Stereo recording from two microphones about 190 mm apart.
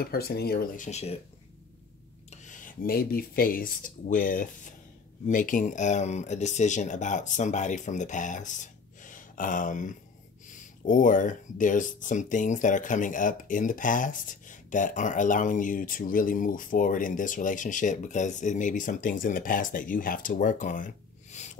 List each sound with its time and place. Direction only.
0.0 s speech: 55° left (ahead or behind)
0.8 s speech: 35° left (ahead or behind)
2.4 s speech: 45° left (ahead or behind)